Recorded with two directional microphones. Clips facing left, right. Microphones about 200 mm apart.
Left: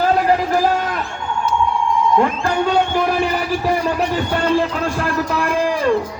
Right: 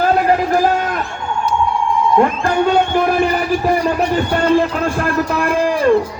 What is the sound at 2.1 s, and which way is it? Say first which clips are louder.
A man's voice: right 5 dB; 50° right (ahead or behind).